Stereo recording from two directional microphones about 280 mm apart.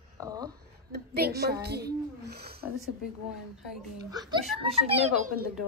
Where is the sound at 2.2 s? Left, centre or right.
Right.